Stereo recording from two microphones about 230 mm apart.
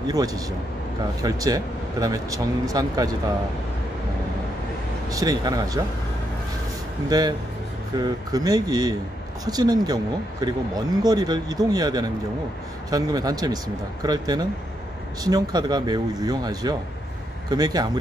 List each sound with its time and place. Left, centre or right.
0.1 s speech: centre
5.1 s speech: centre
7.1 s speech: centre